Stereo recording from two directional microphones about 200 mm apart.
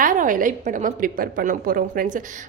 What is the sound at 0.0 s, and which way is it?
A woman's voice, 40° right (ahead or behind).